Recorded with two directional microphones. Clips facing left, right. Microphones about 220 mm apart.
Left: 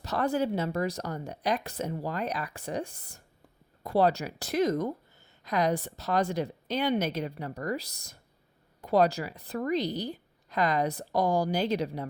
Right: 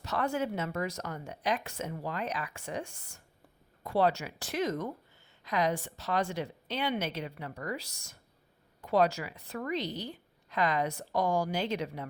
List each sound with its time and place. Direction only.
0.0 s speech: 35° left (ahead or behind)